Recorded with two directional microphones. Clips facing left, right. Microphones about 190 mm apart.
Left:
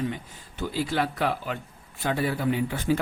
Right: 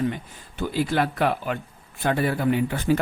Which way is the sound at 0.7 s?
55° right (ahead or behind).